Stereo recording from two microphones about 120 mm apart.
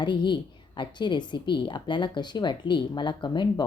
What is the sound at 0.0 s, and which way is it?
A woman's voice, 40° left (ahead or behind).